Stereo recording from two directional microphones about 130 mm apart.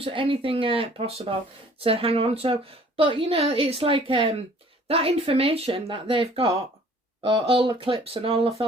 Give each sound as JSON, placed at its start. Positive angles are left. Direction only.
{"t": 0.0, "sound": "speech", "side_deg": -40}